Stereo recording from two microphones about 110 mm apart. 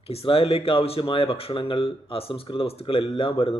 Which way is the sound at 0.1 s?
60° left (ahead or behind).